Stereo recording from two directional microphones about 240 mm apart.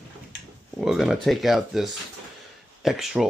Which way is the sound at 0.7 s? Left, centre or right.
Centre.